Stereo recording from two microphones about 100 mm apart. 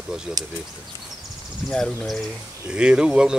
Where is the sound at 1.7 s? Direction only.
5° left (ahead or behind).